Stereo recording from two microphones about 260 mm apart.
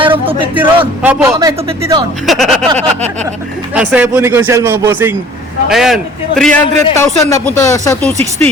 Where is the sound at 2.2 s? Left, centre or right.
Centre.